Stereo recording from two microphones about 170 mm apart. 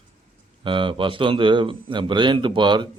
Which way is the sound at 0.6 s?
30° right (ahead or behind).